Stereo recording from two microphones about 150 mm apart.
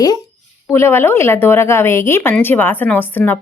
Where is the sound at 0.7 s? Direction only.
15° left (ahead or behind).